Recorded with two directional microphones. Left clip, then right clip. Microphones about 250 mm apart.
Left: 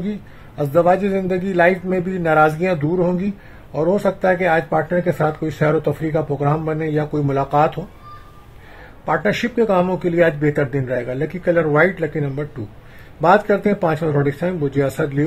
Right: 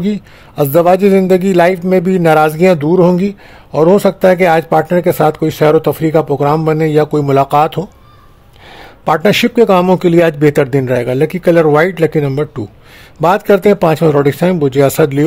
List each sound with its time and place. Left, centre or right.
0.6 s speech: right